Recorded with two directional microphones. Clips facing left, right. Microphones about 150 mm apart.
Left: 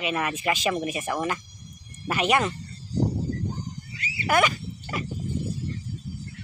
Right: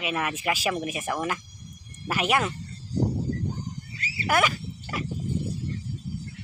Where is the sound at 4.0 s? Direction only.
40° right (ahead or behind).